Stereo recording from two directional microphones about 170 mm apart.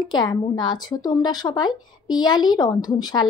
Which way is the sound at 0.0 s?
25° left (ahead or behind).